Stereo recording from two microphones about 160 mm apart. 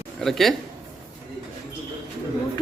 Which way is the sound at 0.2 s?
Centre (ahead or behind).